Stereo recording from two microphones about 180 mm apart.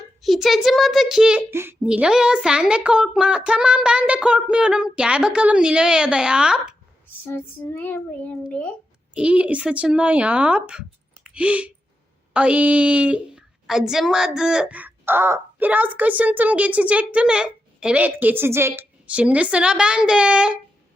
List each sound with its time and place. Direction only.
0.2 s a child's voice: centre (ahead or behind)
7.3 s a child's voice: 10° left (ahead or behind)
9.1 s a woman's voice: 5° right (ahead or behind)